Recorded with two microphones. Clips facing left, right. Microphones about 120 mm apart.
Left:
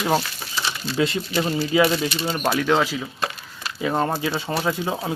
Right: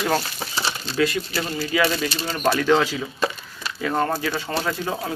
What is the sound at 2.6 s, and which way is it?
Speech, 5° left (ahead or behind).